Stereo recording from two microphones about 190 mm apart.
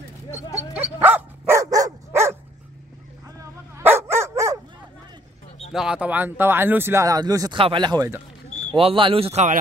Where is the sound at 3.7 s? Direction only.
10° right (ahead or behind).